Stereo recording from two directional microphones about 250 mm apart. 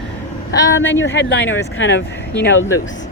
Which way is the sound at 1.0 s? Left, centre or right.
Left.